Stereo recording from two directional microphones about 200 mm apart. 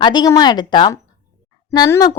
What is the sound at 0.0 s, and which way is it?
Speech, 20° left (ahead or behind).